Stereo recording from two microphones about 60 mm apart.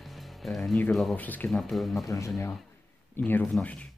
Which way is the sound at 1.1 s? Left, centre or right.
Left.